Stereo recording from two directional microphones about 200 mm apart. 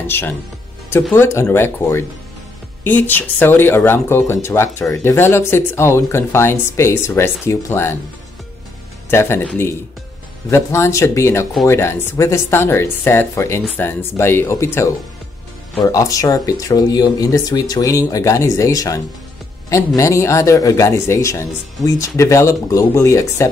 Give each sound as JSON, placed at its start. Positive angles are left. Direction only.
{"t": 0.0, "sound": "speech", "side_deg": 10}
{"t": 9.1, "sound": "speech", "side_deg": 10}